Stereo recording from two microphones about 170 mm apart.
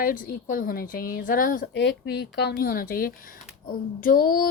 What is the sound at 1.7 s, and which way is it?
A child's voice, 90° left.